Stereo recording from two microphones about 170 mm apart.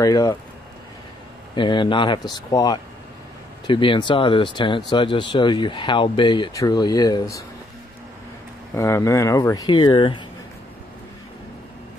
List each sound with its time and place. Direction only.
0.0 s speech: 20° left (ahead or behind)
1.5 s speech: 30° left (ahead or behind)
8.7 s speech: 15° left (ahead or behind)